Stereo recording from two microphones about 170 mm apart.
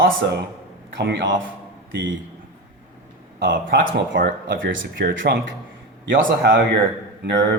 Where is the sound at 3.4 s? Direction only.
90° right.